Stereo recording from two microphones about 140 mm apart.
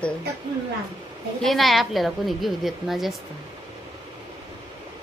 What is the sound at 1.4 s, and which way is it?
A woman's voice, centre (ahead or behind).